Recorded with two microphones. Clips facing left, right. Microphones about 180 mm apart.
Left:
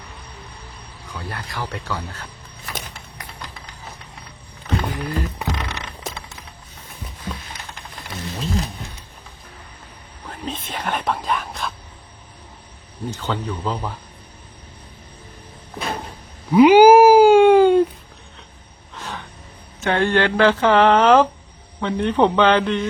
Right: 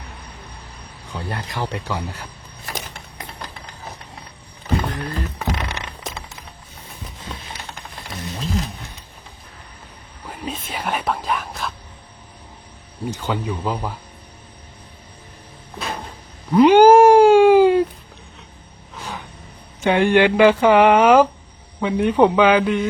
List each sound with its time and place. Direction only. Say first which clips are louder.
1.1 s speech: right 3 dB; 25° right (ahead or behind)
4.9 s vehicle: left 1 dB; 10° left (ahead or behind)
6.0 s music: even; 5° left (ahead or behind)
10.2 s whispering: even; 10° right (ahead or behind)
13.1 s speech: right 1 dB; 10° right (ahead or behind)
16.5 s cat: left 1 dB; 5° left (ahead or behind)
18.9 s a sound: right 1 dB; 5° right (ahead or behind)
19.8 s speech: right 3 dB; 15° right (ahead or behind)